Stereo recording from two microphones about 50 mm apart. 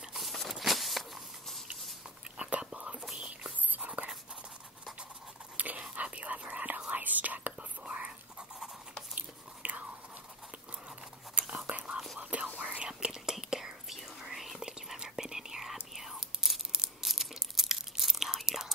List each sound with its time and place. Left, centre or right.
0.1 s biting: centre
2.6 s whispering: right
3.6 s a sound: right
5.6 s whispering: right
9.1 s biting: right
11.6 s whispering: right; by 14.7 s centre
14.7 s whispering: centre